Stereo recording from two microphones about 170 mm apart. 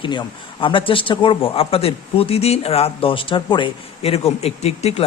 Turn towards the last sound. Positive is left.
turn(degrees=40)  # may be behind; listen again after turning